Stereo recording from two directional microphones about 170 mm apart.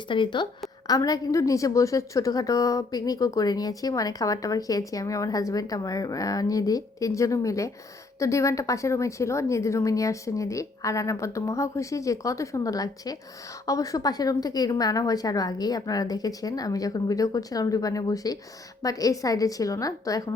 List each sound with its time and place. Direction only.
0.1 s a woman's voice: 30° left (ahead or behind)